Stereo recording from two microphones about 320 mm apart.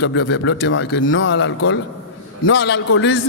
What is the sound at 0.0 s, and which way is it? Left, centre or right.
Speech, left.